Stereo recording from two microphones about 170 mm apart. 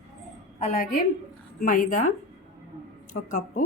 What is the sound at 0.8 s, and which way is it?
A woman's voice, 55° left (ahead or behind).